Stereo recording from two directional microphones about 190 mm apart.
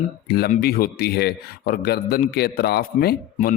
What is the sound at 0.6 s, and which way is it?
A man's voice, 55° left (ahead or behind).